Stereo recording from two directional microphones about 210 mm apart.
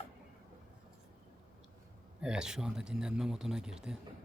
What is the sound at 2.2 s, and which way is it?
Speech, 5° right (ahead or behind).